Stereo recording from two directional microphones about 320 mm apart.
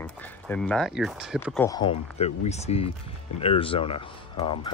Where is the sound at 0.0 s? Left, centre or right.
Centre.